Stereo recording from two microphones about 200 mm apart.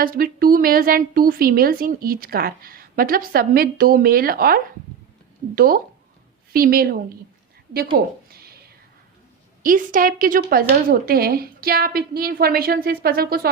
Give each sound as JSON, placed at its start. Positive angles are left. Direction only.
{"t": 0.0, "sound": "a woman's voice", "side_deg": -45}
{"t": 8.3, "sound": "a sound", "side_deg": -50}
{"t": 9.6, "sound": "a woman's voice", "side_deg": -45}